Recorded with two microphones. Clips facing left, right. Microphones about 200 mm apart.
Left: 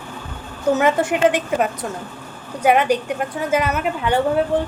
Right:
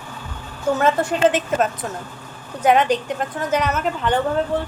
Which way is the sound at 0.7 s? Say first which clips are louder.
Even; 15° left (ahead or behind).